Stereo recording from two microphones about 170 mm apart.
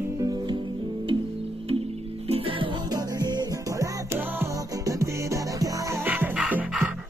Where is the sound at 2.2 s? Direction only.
35° right (ahead or behind); by 6.9 s 5° right (ahead or behind).